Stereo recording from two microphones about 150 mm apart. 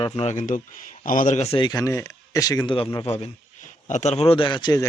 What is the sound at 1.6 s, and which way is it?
A man's voice, 25° left (ahead or behind).